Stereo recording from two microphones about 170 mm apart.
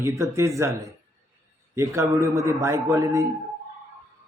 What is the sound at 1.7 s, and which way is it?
Speech, 15° right (ahead or behind).